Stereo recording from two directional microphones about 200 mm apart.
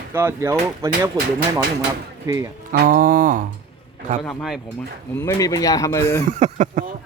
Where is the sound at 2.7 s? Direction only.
45° right (ahead or behind).